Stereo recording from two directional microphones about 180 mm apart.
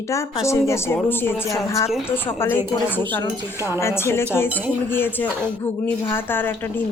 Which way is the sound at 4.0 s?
15° left (ahead or behind).